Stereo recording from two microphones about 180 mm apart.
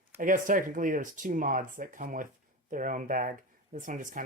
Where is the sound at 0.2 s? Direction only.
50° right (ahead or behind).